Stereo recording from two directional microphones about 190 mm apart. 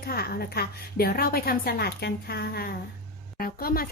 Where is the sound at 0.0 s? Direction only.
55° left (ahead or behind).